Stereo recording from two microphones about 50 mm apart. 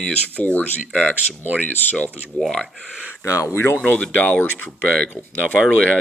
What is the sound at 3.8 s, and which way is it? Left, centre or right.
Speech, left.